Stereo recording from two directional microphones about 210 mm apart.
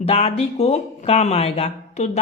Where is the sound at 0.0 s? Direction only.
30° left (ahead or behind).